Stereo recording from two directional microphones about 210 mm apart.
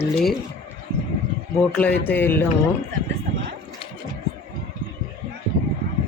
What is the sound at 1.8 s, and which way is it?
Speech, 5° left (ahead or behind).